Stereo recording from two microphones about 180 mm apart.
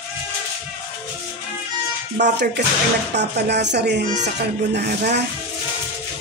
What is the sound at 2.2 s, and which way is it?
Speech, 70° right (ahead or behind).